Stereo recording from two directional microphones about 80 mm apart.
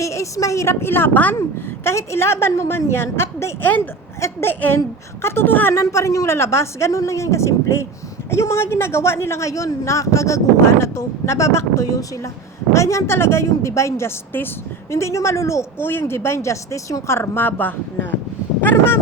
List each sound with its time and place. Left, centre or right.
0.0 s a woman's voice: left
1.4 s a woman's voice: left
5.8 s a woman's voice: left